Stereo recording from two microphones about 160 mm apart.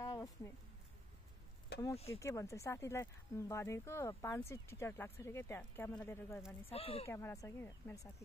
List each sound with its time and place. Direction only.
0.0 s a sound: 20° left (ahead or behind)
2.1 s speech: 20° left (ahead or behind)
6.7 s speech: 40° left (ahead or behind)
7.1 s speech: 15° left (ahead or behind)